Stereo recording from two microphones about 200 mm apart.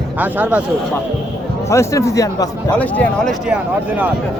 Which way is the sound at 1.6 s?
15° left (ahead or behind).